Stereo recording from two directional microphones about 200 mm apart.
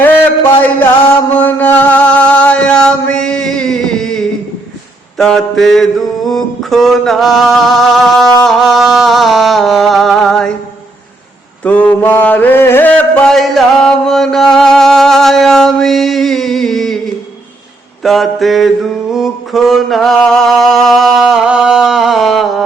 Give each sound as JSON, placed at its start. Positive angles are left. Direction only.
{"t": 0.0, "sound": "mantra", "side_deg": 10}
{"t": 8.3, "sound": "music", "side_deg": 5}
{"t": 11.6, "sound": "mantra", "side_deg": 5}
{"t": 18.0, "sound": "mantra", "side_deg": 0}